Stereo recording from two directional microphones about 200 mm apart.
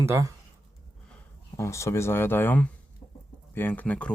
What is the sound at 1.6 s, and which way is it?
Speech, 15° left (ahead or behind).